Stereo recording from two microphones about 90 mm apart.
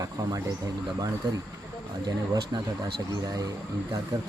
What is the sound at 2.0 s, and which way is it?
Speech, 50° right (ahead or behind).